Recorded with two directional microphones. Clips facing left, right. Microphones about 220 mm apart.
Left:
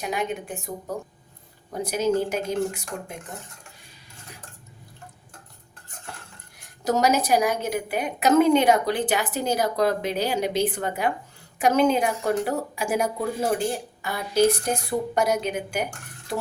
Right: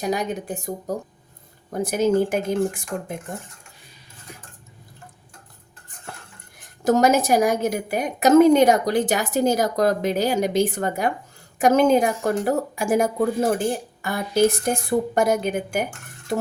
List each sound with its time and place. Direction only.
0.0 s a woman's voice: 40° right (ahead or behind)
1.7 s a woman's voice: 50° right (ahead or behind)
6.8 s a woman's voice: 50° right (ahead or behind)